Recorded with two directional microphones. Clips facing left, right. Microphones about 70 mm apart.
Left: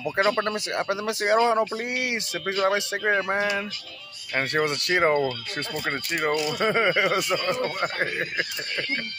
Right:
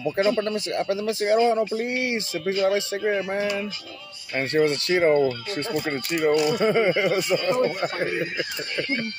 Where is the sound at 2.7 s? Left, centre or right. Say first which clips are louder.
Even; left.